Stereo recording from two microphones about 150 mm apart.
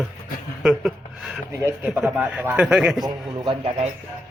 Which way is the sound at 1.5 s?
15° right (ahead or behind).